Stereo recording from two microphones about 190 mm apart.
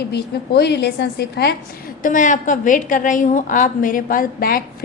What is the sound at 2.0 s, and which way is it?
A woman's voice, 45° left (ahead or behind).